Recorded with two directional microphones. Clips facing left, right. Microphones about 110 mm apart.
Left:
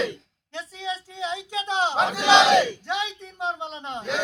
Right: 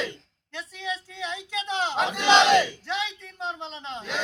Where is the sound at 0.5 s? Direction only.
20° left (ahead or behind).